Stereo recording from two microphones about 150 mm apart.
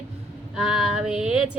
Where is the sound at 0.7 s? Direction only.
5° right (ahead or behind).